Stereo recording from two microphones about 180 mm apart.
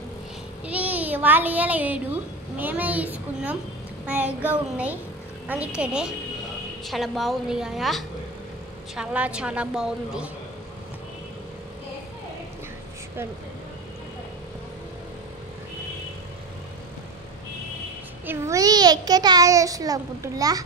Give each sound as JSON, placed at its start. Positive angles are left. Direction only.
{"t": 0.7, "sound": "child singing", "side_deg": -10}
{"t": 2.5, "sound": "a child's voice", "side_deg": -10}
{"t": 18.2, "sound": "a child's voice", "side_deg": -15}